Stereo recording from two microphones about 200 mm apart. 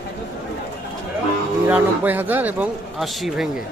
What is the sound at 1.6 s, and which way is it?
Speech, 10° right (ahead or behind).